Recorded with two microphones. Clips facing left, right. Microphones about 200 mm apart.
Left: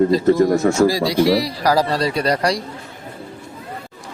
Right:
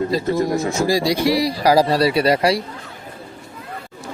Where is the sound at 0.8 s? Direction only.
15° right (ahead or behind).